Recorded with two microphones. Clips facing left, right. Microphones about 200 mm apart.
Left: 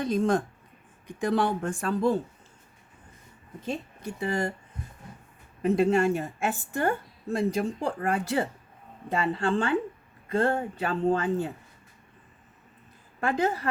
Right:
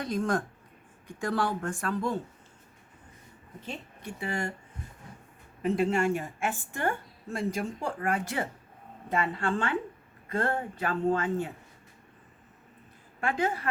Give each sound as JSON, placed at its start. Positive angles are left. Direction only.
{"t": 0.0, "sound": "speech", "side_deg": 25}
{"t": 3.7, "sound": "a woman's voice", "side_deg": 40}
{"t": 5.6, "sound": "a woman's voice", "side_deg": 40}
{"t": 13.2, "sound": "a woman's voice", "side_deg": 35}